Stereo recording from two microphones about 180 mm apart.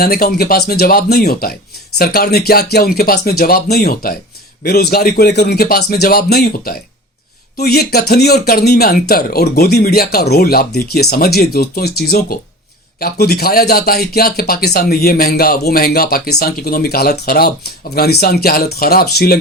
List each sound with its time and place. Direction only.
0.0 s speech: 60° left (ahead or behind)